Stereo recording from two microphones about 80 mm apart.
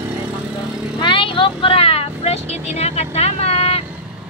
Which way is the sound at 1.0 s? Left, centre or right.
Left.